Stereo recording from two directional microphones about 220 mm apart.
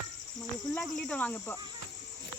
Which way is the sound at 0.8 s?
5° left (ahead or behind).